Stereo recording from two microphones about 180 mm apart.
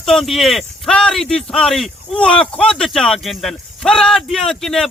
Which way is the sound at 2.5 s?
5° left (ahead or behind).